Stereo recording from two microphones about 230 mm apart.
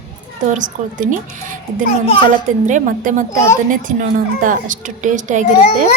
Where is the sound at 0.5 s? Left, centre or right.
Right.